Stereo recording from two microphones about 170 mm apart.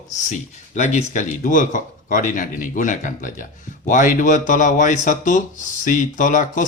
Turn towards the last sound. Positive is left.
turn(degrees=50)  # may be behind; listen again after turning